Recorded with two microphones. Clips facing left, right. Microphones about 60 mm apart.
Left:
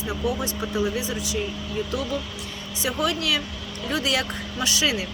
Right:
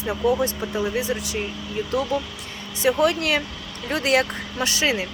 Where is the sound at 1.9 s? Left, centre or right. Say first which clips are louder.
Right 4 dB; right.